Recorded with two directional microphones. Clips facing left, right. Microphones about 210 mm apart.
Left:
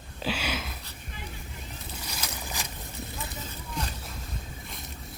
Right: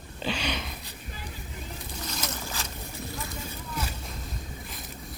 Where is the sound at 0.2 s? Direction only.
5° left (ahead or behind).